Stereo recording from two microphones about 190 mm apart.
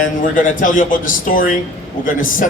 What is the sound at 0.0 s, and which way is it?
A man's voice, 45° left (ahead or behind).